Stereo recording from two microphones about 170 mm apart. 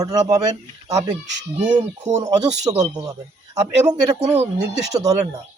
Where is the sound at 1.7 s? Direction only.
40° right (ahead or behind).